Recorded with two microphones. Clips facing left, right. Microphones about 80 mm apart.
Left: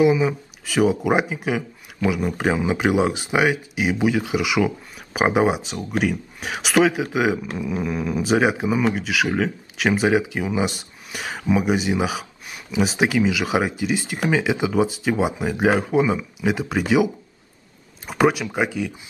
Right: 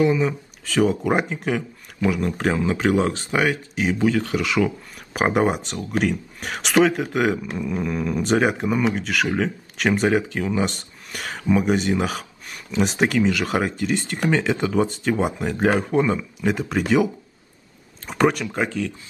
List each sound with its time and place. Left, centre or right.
0.0 s speech: centre